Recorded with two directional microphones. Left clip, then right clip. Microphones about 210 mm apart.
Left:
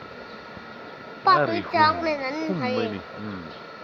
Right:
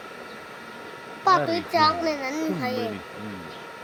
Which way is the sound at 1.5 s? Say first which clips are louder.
Left 1 dB; 20° right (ahead or behind).